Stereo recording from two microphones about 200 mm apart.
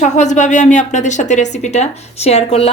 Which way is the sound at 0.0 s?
35° left (ahead or behind).